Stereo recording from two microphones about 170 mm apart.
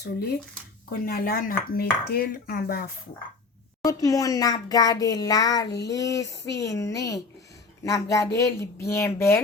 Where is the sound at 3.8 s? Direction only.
20° left (ahead or behind).